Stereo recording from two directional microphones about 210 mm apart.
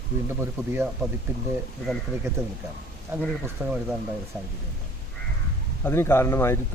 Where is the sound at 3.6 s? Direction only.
5° right (ahead or behind).